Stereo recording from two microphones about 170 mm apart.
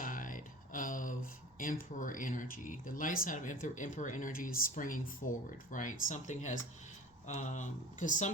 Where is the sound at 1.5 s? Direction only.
55° left (ahead or behind).